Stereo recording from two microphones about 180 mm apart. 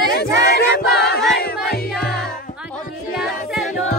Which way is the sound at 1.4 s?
65° left (ahead or behind).